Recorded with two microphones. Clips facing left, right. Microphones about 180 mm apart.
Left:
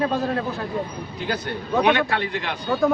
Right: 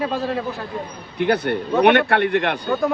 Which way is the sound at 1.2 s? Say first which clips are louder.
Right 9 dB; 65° right (ahead or behind).